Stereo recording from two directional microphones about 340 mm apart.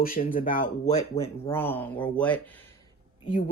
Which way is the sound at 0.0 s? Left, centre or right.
Left.